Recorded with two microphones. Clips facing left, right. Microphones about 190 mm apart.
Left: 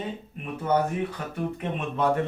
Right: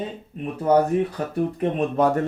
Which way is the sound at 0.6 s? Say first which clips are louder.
Right 6 dB; 35° right (ahead or behind).